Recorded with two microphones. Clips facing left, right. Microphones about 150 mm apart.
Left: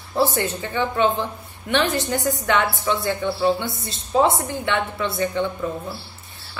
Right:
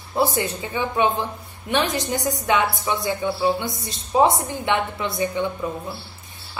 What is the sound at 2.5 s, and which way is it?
A woman's voice, 15° right (ahead or behind).